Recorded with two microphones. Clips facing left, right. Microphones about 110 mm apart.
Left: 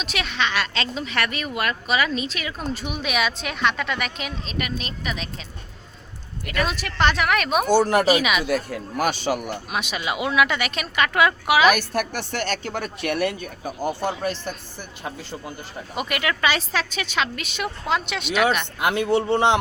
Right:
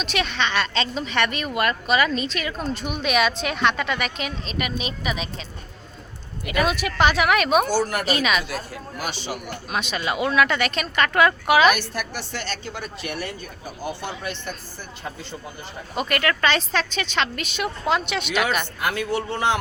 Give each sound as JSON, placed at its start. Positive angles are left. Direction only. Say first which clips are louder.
{"t": 0.0, "sound": "speech", "louder": "right 1 dB", "side_deg": 0}
{"t": 7.7, "sound": "a man's voice", "louder": "left 5 dB", "side_deg": 25}
{"t": 8.0, "sound": "speech", "louder": "left 3 dB", "side_deg": 10}
{"t": 8.4, "sound": "speech", "louder": "left 7 dB", "side_deg": 55}
{"t": 9.7, "sound": "speech", "louder": "right 2 dB", "side_deg": 10}
{"t": 11.8, "sound": "speech", "louder": "left 4 dB", "side_deg": 50}
{"t": 13.8, "sound": "speech", "louder": "left 5 dB", "side_deg": 45}
{"t": 16.0, "sound": "speech", "louder": "right 2 dB", "side_deg": 10}
{"t": 18.8, "sound": "a man's voice", "louder": "left 4 dB", "side_deg": 25}